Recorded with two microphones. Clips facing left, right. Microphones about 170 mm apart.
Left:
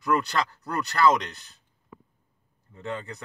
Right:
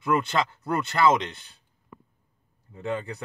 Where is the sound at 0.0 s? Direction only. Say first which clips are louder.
Right 1 dB; 25° right (ahead or behind).